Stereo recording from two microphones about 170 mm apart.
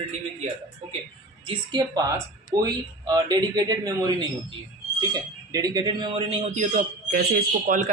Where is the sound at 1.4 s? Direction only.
25° right (ahead or behind).